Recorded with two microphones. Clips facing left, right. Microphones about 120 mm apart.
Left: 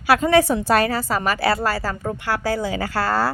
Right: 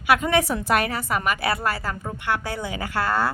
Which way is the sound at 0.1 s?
35° left (ahead or behind).